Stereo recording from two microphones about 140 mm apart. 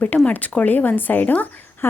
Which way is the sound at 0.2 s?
10° left (ahead or behind).